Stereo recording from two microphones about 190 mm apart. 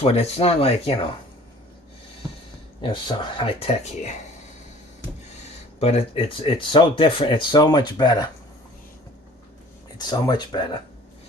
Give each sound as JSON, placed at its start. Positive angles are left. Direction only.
{"t": 0.0, "sound": "speech", "side_deg": 35}
{"t": 2.8, "sound": "speech", "side_deg": 25}
{"t": 5.8, "sound": "speech", "side_deg": 30}
{"t": 10.1, "sound": "speech", "side_deg": 20}